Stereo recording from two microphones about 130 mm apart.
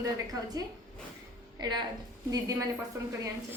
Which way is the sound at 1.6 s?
35° right (ahead or behind).